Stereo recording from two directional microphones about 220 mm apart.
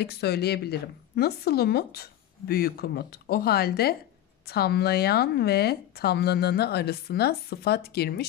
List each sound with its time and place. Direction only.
0.0 s a woman's voice: 45° left (ahead or behind)